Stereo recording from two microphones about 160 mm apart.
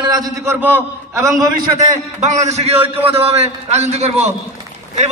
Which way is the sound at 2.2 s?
45° right (ahead or behind).